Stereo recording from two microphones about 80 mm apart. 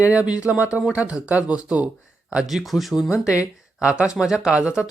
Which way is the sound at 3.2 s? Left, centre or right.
Centre.